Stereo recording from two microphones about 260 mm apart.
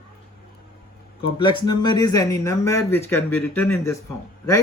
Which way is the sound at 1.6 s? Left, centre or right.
Centre.